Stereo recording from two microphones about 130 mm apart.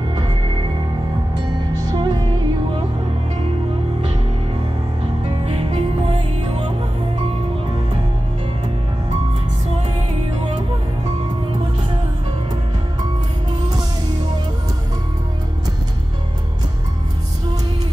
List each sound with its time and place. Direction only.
1.3 s music: 30° right (ahead or behind)
5.4 s music: 45° right (ahead or behind)